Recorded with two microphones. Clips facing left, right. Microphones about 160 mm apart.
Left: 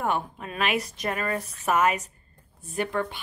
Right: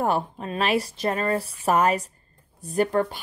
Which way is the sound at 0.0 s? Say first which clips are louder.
Right 4 dB; 35° right (ahead or behind).